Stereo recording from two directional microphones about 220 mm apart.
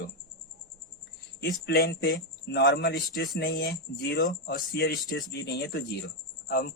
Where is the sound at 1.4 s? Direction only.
45° left (ahead or behind).